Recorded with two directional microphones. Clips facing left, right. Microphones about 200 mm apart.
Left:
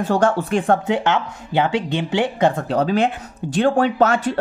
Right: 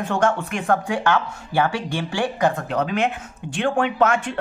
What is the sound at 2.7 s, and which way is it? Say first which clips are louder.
Speech: left 4 dB; 35° left (ahead or behind).